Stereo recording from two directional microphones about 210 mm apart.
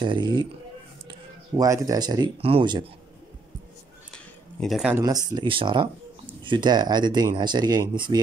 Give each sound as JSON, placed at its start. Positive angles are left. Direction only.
{"t": 0.0, "sound": "speech", "side_deg": -20}
{"t": 1.6, "sound": "speech", "side_deg": -15}
{"t": 4.1, "sound": "a sound", "side_deg": 0}
{"t": 5.3, "sound": "speech", "side_deg": -25}